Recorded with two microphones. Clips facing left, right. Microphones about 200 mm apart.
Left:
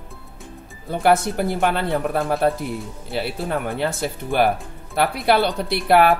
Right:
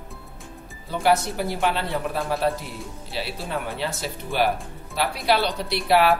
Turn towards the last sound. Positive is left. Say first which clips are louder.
# left 3 dB
turn(degrees=55)  # may be behind; listen again after turning